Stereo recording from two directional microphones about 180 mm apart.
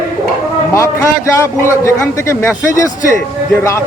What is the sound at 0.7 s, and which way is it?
A man's voice, 15° left (ahead or behind).